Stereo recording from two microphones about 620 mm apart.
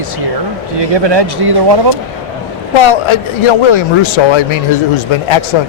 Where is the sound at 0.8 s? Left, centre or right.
Right.